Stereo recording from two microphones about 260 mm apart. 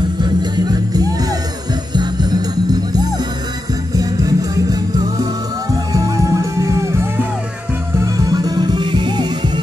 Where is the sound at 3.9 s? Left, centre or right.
Centre.